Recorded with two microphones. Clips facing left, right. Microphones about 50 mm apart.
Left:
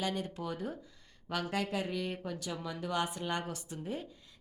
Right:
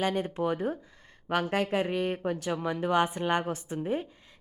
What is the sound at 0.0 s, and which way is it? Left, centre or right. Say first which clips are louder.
A woman's voice: right 8 dB; right.